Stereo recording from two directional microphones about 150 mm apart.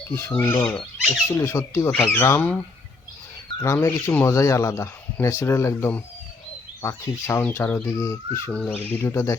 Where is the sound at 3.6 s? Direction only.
20° left (ahead or behind).